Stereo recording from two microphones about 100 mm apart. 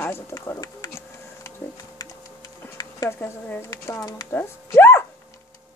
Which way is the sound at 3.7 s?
35° left (ahead or behind).